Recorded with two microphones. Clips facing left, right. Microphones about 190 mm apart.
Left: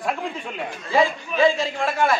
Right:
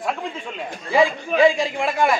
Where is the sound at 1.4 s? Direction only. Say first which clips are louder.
Right 2 dB; 15° right (ahead or behind).